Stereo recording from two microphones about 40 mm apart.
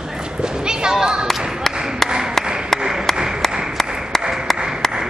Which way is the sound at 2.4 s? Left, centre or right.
Centre.